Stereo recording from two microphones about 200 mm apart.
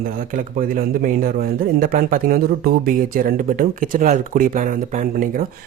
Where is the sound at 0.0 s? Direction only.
45° right (ahead or behind).